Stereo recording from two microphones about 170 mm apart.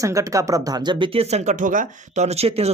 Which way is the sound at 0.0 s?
20° right (ahead or behind).